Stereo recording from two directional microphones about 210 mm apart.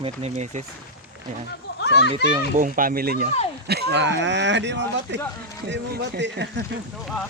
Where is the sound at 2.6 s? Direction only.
40° right (ahead or behind); by 6.5 s 55° right (ahead or behind).